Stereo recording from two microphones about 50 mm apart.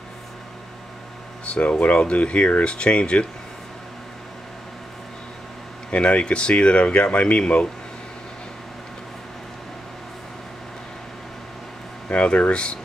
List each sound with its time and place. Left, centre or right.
1.4 s speech: left
5.9 s speech: left
12.1 s speech: left